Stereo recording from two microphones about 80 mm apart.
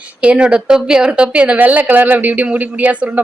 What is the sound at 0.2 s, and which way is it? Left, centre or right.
A woman's voice, centre.